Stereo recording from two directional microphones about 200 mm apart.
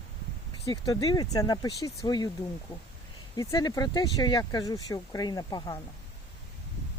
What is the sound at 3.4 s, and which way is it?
Speech, 20° left (ahead or behind).